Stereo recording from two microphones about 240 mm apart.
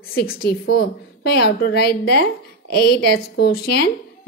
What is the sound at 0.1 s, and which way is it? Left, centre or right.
A woman's voice, left.